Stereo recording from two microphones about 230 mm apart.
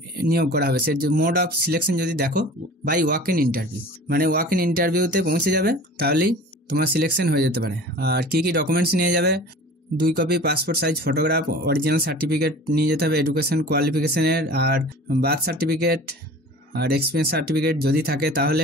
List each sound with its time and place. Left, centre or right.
0.2 s speech: right